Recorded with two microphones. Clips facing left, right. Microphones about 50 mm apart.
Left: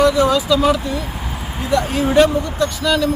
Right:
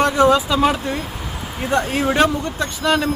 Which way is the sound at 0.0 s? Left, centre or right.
Right.